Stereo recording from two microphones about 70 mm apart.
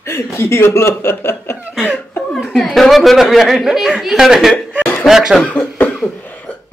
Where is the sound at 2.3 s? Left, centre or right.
Centre.